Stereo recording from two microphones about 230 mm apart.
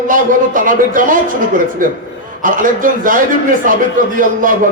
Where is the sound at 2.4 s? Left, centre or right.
Right.